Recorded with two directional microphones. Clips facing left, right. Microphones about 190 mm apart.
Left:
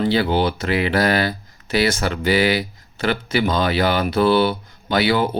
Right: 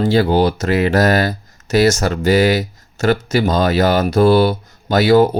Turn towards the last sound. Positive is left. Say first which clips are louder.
# right 7 dB
turn(degrees=-40)  # may be behind; listen again after turning